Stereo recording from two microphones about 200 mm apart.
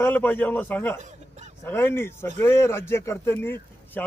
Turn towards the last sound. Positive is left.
turn(degrees=10)  # may be behind; listen again after turning